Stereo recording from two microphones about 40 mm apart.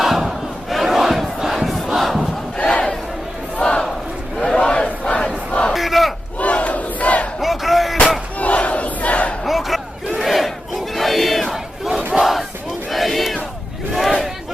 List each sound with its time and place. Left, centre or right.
0.0 s crowd: centre
2.6 s crowd: left
4.4 s battle cry: left
5.7 s battle cry: centre
6.4 s crowd: left
7.4 s music: centre
8.4 s crowd: left
9.4 s battle cry: centre
11.5 s battle cry: centre
12.2 s battle cry: centre
13.9 s a sound: centre